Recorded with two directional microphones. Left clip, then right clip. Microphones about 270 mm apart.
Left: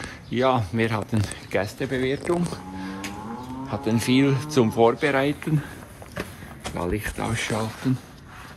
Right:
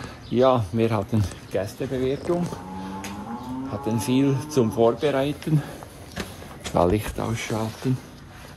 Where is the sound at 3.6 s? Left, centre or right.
Centre.